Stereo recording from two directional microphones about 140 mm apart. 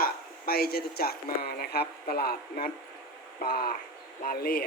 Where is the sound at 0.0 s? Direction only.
90° left.